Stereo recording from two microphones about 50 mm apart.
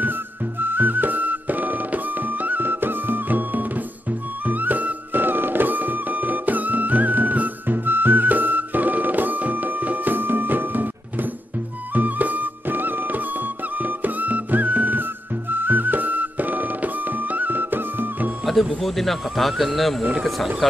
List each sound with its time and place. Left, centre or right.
0.0 s music: right
18.4 s speech: centre